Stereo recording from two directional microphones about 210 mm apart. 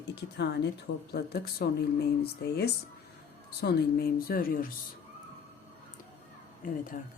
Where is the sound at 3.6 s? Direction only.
45° left (ahead or behind).